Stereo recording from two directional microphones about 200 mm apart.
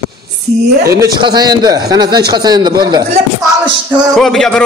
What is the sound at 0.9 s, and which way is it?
A man's voice, 15° right (ahead or behind).